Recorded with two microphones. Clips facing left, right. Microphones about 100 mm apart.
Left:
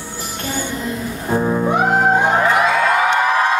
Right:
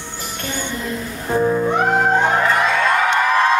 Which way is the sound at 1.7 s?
5° left (ahead or behind).